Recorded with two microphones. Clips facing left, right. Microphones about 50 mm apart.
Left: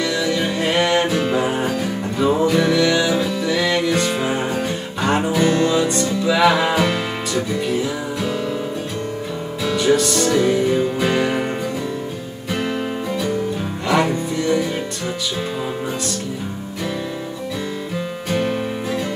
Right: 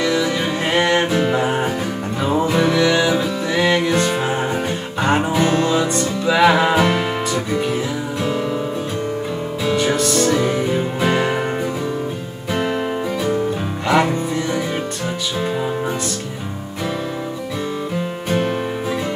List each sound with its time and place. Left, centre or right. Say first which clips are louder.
0.0 s music: right 1 dB; centre
9.7 s music: left 1 dB; right
13.8 s music: right 2 dB; centre
18.3 s music: right 1 dB; centre